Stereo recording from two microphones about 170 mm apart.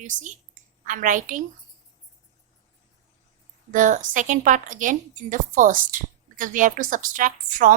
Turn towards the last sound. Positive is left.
turn(degrees=-50)  # may be behind; listen again after turning